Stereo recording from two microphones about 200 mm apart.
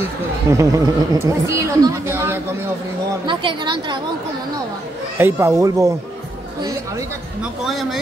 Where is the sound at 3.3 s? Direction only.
25° right (ahead or behind).